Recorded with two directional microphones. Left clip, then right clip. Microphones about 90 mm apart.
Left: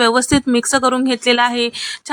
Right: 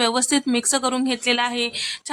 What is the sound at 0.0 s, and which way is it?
A woman's voice, 30° left (ahead or behind).